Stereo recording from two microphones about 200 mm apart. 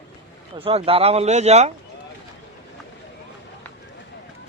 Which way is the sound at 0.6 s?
30° right (ahead or behind).